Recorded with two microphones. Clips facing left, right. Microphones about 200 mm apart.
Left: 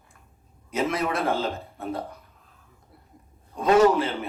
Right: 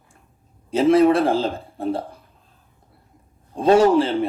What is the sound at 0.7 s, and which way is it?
Speech, 30° right (ahead or behind).